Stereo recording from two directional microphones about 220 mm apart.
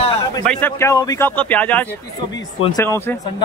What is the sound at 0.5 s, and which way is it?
Speech, 10° left (ahead or behind).